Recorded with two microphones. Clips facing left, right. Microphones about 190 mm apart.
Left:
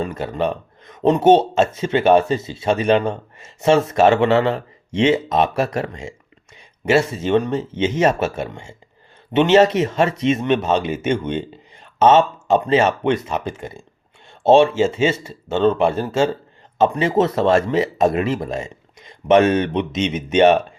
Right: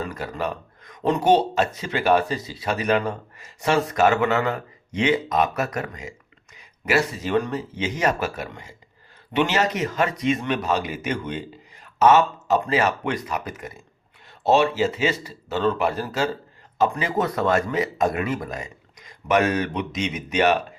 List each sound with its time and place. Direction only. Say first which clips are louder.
0.0 s speech: left 6 dB; 25° left (ahead or behind)